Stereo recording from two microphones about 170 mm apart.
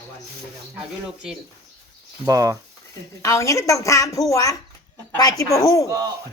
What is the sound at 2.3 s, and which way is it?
Speech, 20° right (ahead or behind).